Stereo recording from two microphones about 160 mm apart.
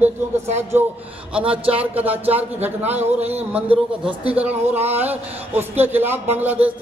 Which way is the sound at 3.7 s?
35° right (ahead or behind).